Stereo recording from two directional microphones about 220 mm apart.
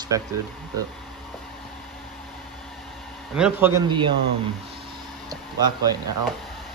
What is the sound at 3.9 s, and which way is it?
Speech, 20° right (ahead or behind).